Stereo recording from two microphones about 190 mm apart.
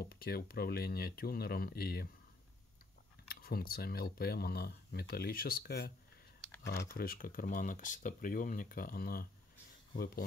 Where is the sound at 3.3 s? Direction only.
50° left (ahead or behind).